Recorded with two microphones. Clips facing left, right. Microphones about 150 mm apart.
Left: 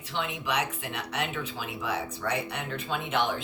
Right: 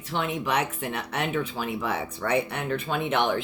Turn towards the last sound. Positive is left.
turn(degrees=-60)  # may be behind; listen again after turning